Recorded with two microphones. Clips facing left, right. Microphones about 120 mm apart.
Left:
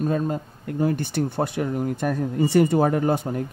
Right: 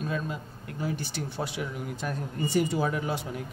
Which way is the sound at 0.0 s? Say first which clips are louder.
Left 9 dB; 45° left (ahead or behind).